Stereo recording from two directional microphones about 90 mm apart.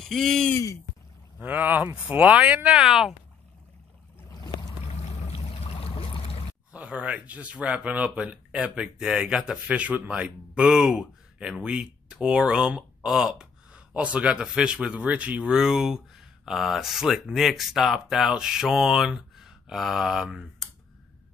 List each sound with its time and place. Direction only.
0.0 s speech: 5° left (ahead or behind)
1.4 s speech: 20° right (ahead or behind)
4.3 s boat: 50° left (ahead or behind)
4.8 s boat: 90° left
6.7 s speech: 15° right (ahead or behind)